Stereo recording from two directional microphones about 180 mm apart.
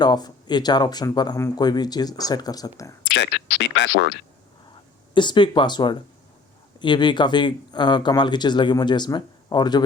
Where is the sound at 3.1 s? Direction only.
85° left.